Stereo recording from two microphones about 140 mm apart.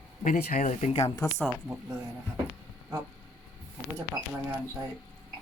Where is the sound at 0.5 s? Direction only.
60° left (ahead or behind).